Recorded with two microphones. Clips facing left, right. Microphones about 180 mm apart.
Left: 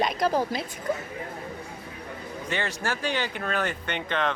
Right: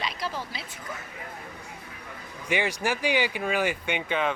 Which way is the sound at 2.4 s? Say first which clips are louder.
Right 3 dB; 10° right (ahead or behind).